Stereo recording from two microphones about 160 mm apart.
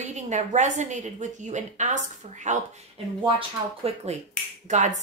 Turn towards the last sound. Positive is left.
turn(degrees=-50)  # may be behind; listen again after turning